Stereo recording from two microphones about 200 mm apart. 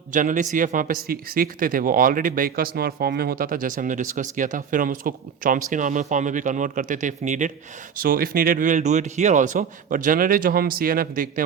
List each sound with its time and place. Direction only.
0.1 s speech: 40° right (ahead or behind)